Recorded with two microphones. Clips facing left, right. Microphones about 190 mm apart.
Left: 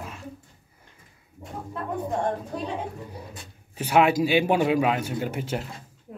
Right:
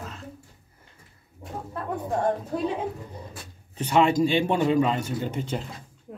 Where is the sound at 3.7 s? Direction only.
5° left (ahead or behind).